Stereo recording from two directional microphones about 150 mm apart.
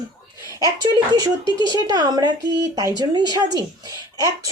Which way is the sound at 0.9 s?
25° right (ahead or behind).